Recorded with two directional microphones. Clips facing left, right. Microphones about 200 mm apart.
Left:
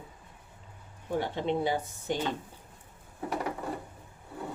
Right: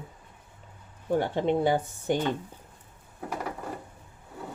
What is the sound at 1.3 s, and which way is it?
Speech, 50° right (ahead or behind).